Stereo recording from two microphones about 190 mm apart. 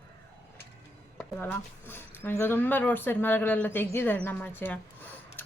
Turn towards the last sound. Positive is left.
turn(degrees=10)  # may be behind; listen again after turning